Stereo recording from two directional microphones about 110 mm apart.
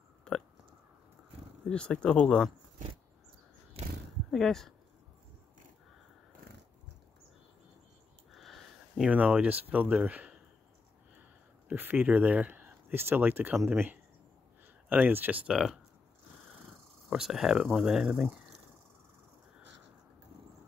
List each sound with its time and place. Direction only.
0.3 s a sound: 5° left (ahead or behind)
1.7 s speech: 10° left (ahead or behind)
3.8 s roaring cats: 70° right (ahead or behind)
4.3 s speech: 5° left (ahead or behind)
8.3 s speech: centre (ahead or behind)
11.7 s speech: 15° right (ahead or behind)
17.1 s speech: 5° right (ahead or behind)